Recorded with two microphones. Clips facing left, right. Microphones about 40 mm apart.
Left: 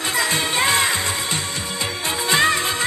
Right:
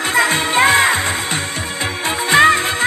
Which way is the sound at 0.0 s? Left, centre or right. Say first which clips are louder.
Right 6 dB; right.